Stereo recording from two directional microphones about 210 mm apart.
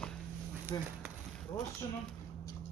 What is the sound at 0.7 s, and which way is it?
Speech, 20° left (ahead or behind).